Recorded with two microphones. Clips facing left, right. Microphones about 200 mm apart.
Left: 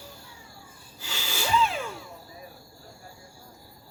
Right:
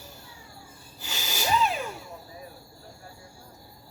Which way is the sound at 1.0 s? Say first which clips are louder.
Right 2 dB; 15° right (ahead or behind).